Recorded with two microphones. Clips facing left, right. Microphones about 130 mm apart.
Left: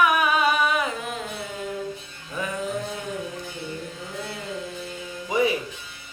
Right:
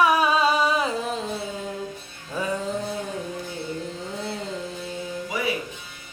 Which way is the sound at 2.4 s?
30° right (ahead or behind).